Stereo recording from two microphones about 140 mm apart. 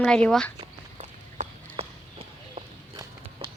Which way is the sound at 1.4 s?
55° right (ahead or behind).